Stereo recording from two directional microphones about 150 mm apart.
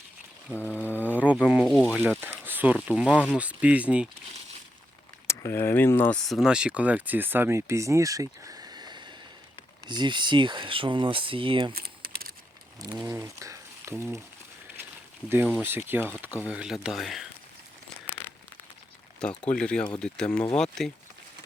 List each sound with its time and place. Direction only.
0.5 s speech: 15° left (ahead or behind)
0.9 s bee: 10° right (ahead or behind)
1.5 s speech: centre (ahead or behind)
5.3 s speech: 15° left (ahead or behind)
6.1 s speech: centre (ahead or behind); by 11.7 s 35° right (ahead or behind)
11.7 s typing: 90° right
13.0 s speech: 25° right (ahead or behind)
15.6 s speech: 15° right (ahead or behind)
18.0 s crumpling: 15° left (ahead or behind)
19.4 s speech: 5° left (ahead or behind)